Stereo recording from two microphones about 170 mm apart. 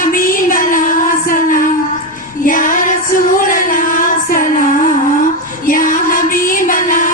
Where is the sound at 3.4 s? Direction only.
50° left (ahead or behind).